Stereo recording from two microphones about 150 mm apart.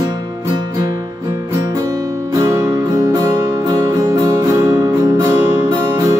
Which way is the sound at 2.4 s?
20° right (ahead or behind).